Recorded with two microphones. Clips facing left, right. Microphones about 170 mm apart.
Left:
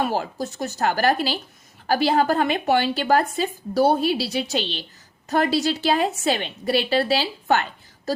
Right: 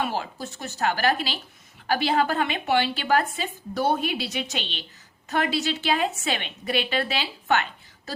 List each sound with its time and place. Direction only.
0.0 s speech: 40° left (ahead or behind)